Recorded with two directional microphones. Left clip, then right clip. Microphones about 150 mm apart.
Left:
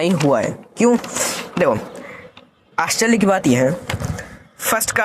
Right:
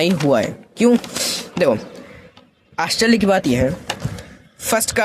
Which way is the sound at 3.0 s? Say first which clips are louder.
Right 1 dB; 5° right (ahead or behind).